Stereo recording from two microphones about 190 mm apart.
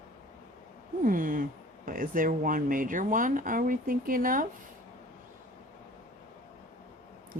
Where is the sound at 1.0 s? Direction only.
45° right (ahead or behind).